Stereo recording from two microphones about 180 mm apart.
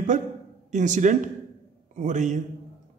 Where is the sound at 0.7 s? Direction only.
40° right (ahead or behind).